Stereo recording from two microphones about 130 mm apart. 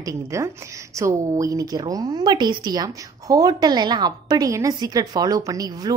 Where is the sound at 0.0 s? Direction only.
25° right (ahead or behind).